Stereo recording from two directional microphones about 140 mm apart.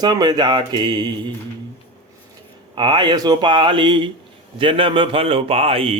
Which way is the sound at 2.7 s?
35° right (ahead or behind).